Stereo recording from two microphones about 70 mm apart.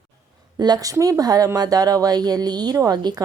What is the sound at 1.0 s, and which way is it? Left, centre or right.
Speech, right.